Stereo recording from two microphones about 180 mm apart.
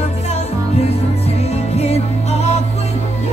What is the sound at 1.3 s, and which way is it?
Music, 35° left (ahead or behind).